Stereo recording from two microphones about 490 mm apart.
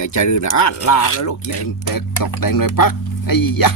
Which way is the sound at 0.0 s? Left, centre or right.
Left.